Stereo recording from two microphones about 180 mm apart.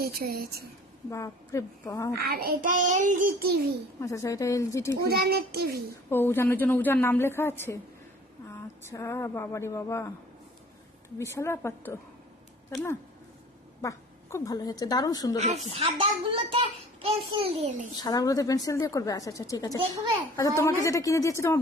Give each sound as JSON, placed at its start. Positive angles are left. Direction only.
{"t": 0.0, "sound": "a child's voice", "side_deg": -55}
{"t": 1.1, "sound": "a woman's voice", "side_deg": 15}
{"t": 2.2, "sound": "child singing", "side_deg": -55}
{"t": 4.0, "sound": "a woman's voice", "side_deg": 15}
{"t": 5.0, "sound": "a child's voice", "side_deg": -60}
{"t": 6.1, "sound": "a woman's voice", "side_deg": 10}
{"t": 8.9, "sound": "a woman's voice", "side_deg": 15}
{"t": 11.2, "sound": "a woman's voice", "side_deg": 15}
{"t": 13.8, "sound": "speech", "side_deg": 15}
{"t": 15.4, "sound": "a child's voice", "side_deg": -35}
{"t": 18.0, "sound": "a woman's voice", "side_deg": 20}